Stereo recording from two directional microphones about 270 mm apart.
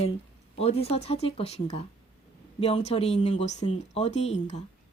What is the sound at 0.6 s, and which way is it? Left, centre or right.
Speech, left.